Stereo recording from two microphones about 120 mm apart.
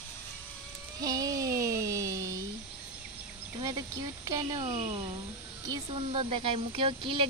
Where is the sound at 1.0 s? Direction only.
30° right (ahead or behind).